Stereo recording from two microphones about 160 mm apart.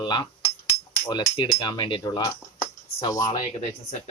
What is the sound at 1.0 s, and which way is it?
Cutlery, 20° left (ahead or behind).